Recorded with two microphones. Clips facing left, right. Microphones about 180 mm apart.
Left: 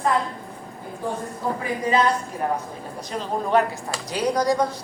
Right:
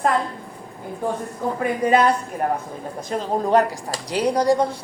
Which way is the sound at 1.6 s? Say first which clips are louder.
Right 4 dB; 60° right (ahead or behind).